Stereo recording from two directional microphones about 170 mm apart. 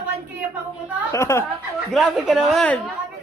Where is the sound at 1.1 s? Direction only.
15° left (ahead or behind).